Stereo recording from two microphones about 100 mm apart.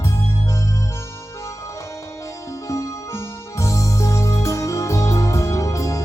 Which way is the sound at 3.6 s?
30° left (ahead or behind).